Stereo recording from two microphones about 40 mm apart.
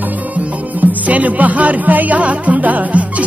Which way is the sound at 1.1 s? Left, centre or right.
Right.